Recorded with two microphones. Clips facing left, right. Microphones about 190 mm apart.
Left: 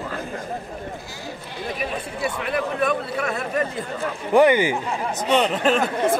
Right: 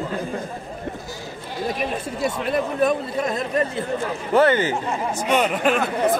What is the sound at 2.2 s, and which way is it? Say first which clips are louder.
Speech: right 2 dB; 30° right (ahead or behind).